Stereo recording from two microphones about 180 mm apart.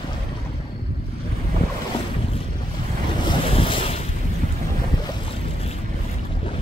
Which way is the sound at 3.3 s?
30° left (ahead or behind).